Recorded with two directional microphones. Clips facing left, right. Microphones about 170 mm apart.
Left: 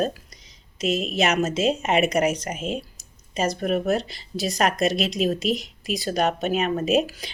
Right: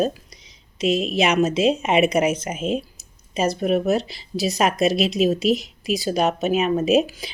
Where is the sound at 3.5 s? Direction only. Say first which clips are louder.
Right 3 dB; 5° right (ahead or behind).